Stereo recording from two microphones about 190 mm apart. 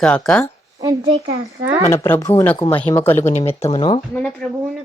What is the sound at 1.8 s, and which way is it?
Speech, 10° left (ahead or behind).